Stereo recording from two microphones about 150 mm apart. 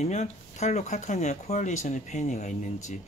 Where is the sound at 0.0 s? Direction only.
45° left (ahead or behind).